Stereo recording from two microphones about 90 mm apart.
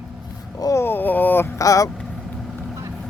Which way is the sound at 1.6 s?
40° left (ahead or behind).